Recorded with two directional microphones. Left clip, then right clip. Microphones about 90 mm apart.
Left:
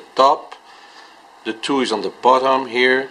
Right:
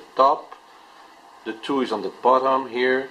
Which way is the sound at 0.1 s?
40° left (ahead or behind).